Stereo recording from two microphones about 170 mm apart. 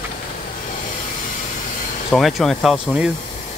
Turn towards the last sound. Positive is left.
turn(degrees=-5)  # may be behind; listen again after turning